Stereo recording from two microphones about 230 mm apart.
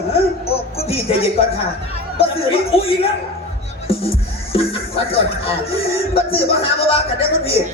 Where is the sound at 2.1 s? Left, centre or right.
Left.